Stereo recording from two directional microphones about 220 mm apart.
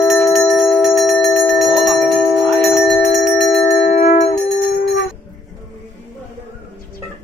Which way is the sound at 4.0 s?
30° left (ahead or behind).